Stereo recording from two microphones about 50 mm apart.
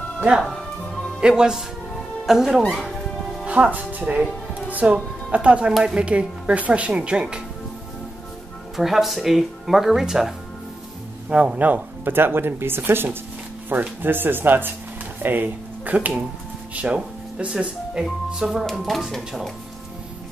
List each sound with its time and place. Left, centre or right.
0.4 s speech: centre
1.2 s speech: centre
3.4 s speech: right
4.6 s music: right
5.3 s speech: right
5.7 s speech: centre
5.9 s speech: right
8.7 s speech: centre
11.2 s speech: right
11.5 s speech: right
17.5 s speech: centre
19.1 s speech: centre